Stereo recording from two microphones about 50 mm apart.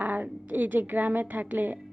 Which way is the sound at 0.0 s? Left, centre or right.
Right.